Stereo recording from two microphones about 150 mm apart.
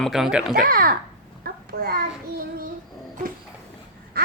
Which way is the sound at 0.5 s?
75° right (ahead or behind).